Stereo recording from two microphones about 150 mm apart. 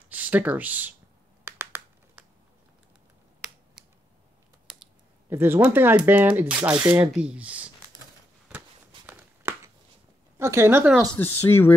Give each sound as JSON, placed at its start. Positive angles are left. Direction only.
{"t": 0.1, "sound": "speech", "side_deg": -10}
{"t": 1.4, "sound": "a sound", "side_deg": -15}
{"t": 3.3, "sound": "finger snapping", "side_deg": -5}
{"t": 5.3, "sound": "speech", "side_deg": -15}
{"t": 8.5, "sound": "a sound", "side_deg": -10}
{"t": 10.3, "sound": "speech", "side_deg": -15}
{"t": 11.1, "sound": "speech", "side_deg": 15}